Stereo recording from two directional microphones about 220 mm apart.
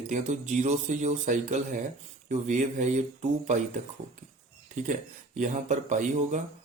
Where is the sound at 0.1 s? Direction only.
35° right (ahead or behind).